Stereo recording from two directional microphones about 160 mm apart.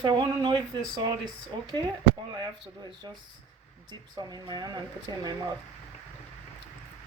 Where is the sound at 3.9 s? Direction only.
25° right (ahead or behind).